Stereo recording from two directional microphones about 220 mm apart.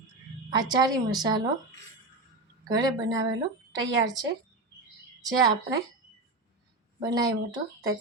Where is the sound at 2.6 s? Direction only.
20° right (ahead or behind).